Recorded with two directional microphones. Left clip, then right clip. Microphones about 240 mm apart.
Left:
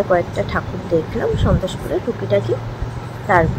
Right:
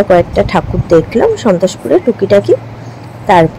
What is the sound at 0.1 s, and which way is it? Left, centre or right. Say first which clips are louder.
Speech: right 9 dB; right.